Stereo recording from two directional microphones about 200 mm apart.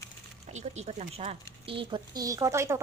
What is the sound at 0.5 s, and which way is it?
Speech, 35° right (ahead or behind).